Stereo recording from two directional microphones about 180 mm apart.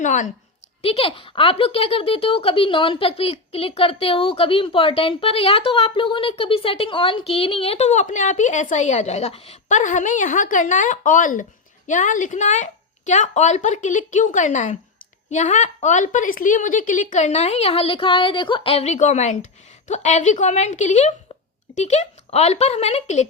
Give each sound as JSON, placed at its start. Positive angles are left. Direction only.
{"t": 0.0, "sound": "speech", "side_deg": 45}
{"t": 0.8, "sound": "speech", "side_deg": 30}